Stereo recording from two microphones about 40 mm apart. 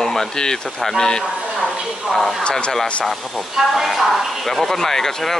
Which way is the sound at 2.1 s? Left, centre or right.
Centre.